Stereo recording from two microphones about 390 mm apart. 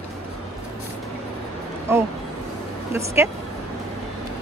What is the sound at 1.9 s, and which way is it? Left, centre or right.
Speech, centre.